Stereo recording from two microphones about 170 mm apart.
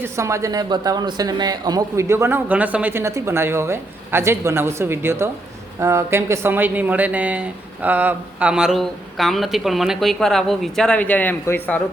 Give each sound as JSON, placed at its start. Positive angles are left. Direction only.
{"t": 0.0, "sound": "speech", "side_deg": -15}